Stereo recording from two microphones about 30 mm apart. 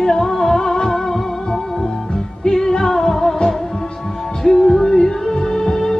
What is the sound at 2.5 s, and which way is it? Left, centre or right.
Music, left.